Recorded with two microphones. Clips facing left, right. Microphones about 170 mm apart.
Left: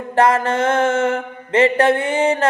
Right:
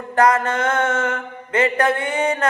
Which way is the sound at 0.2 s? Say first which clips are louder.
Left 2 dB; 25° left (ahead or behind).